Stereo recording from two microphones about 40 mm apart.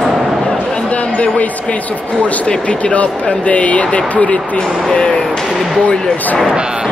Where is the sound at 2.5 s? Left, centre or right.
Left.